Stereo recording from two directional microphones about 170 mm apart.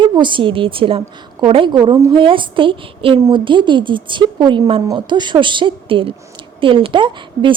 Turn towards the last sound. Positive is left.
turn(degrees=-30)  # may be behind; listen again after turning